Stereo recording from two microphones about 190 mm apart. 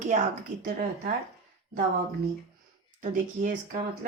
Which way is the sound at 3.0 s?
45° right (ahead or behind).